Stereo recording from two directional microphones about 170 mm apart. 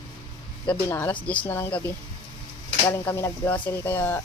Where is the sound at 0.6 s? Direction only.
10° left (ahead or behind).